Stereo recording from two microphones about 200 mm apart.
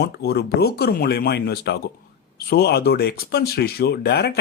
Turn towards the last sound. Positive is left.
turn(degrees=55)  # may be behind; listen again after turning